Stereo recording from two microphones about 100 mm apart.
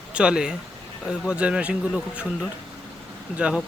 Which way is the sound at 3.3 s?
10° right (ahead or behind).